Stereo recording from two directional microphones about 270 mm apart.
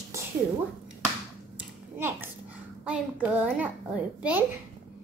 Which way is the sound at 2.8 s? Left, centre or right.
Centre.